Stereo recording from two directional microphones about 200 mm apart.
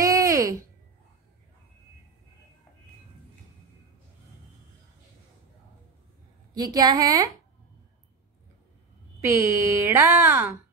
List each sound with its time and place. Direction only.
0.0 s a sound: 15° right (ahead or behind)
6.5 s a woman's voice: 20° right (ahead or behind)
9.2 s a woman's voice: 15° right (ahead or behind)